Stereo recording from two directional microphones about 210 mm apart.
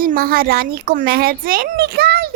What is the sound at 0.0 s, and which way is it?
A woman's voice, 45° right (ahead or behind).